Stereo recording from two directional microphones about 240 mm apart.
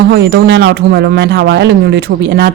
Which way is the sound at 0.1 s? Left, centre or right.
Right.